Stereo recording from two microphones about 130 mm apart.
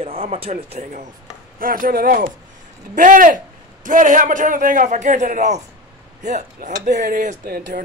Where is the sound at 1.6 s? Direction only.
90° right.